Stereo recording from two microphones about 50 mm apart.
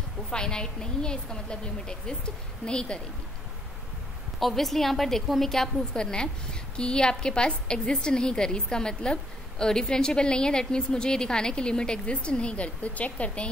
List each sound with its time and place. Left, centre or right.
0.3 s a woman's voice: centre
4.4 s a woman's voice: centre
5.9 s a woman's voice: centre